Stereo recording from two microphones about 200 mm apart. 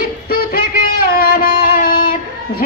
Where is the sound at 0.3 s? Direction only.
50° left (ahead or behind).